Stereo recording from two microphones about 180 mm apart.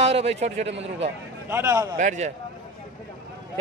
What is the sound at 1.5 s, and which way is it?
Speech, 15° right (ahead or behind).